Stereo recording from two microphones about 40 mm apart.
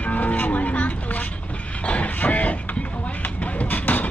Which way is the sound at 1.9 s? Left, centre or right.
Left.